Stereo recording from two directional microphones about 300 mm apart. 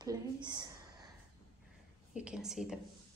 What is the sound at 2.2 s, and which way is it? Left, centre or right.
Speech, centre.